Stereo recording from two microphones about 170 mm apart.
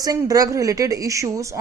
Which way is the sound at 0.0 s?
20° right (ahead or behind).